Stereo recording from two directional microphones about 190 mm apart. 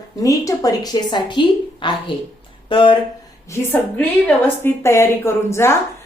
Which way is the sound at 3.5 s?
10° left (ahead or behind).